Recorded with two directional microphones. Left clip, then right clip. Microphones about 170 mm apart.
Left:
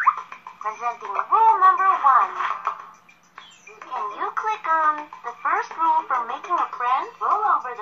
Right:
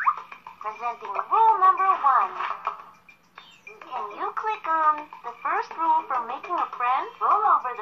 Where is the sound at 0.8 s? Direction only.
20° right (ahead or behind).